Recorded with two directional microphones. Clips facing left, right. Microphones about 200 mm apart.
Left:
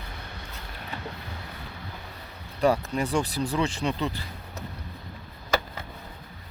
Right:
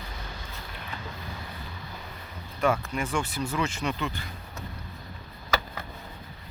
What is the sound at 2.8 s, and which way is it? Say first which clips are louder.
Speech: left 3 dB; 35° left (ahead or behind).